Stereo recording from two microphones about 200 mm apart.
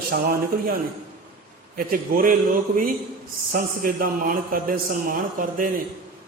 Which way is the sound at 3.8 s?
45° right (ahead or behind).